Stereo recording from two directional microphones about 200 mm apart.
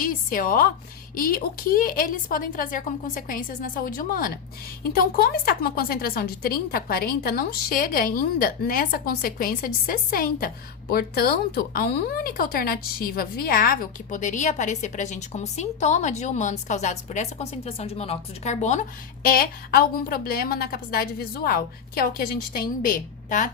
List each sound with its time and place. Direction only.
0.0 s a woman's voice: 45° left (ahead or behind)